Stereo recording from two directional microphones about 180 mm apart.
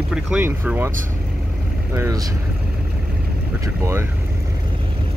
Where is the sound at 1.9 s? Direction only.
15° right (ahead or behind).